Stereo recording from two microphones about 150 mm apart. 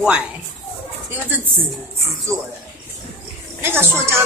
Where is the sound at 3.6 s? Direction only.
15° right (ahead or behind).